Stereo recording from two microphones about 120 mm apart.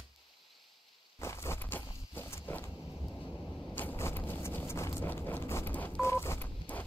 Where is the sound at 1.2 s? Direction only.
20° left (ahead or behind).